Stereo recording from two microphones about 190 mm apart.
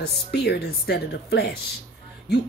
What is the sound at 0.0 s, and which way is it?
Speech, 55° left (ahead or behind).